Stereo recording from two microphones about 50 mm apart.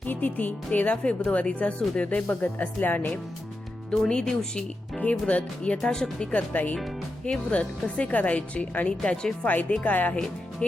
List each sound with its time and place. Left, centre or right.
0.0 s speech: left
3.9 s speech: centre
5.8 s speech: centre
6.3 s speech: left
8.9 s speech: centre
9.5 s speech: left